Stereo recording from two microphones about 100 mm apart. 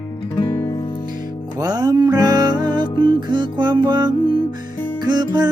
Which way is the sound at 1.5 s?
40° right (ahead or behind).